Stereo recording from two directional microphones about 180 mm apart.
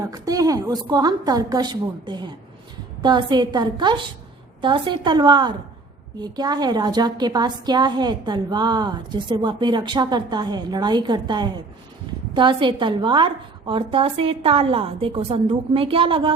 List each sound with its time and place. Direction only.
0.0 s a woman's voice: 20° right (ahead or behind)